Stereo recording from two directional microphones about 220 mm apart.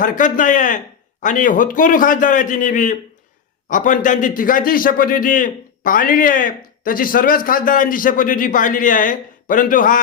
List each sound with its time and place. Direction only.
0.0 s a man's voice: 35° left (ahead or behind)